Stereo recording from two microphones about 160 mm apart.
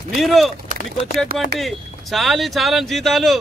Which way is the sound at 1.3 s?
65° right (ahead or behind).